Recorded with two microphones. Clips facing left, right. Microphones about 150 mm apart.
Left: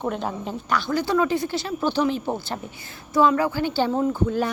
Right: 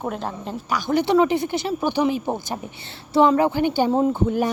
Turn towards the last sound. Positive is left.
turn(degrees=-20)  # may be behind; listen again after turning